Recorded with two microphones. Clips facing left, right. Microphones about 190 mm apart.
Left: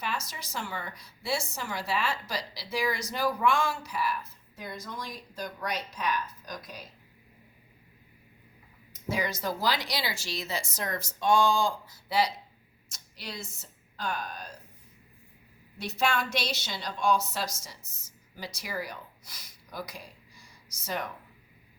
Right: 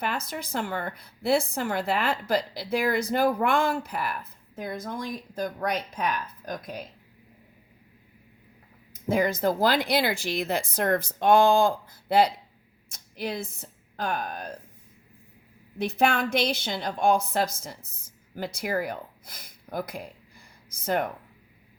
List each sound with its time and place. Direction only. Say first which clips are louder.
0.0 s a woman's voice: right 5 dB; 55° right (ahead or behind)
9.0 s a woman's voice: right 8 dB; 55° right (ahead or behind)
15.8 s a woman's voice: right 5 dB; 55° right (ahead or behind)